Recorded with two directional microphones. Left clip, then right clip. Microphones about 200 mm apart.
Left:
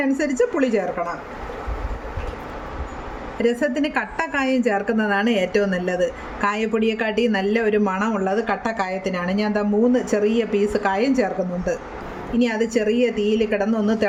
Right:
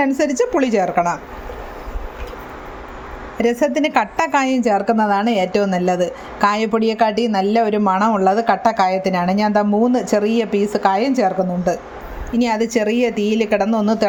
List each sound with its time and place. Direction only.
0.0 s a woman's voice: 25° right (ahead or behind)
3.3 s a woman's voice: 30° right (ahead or behind)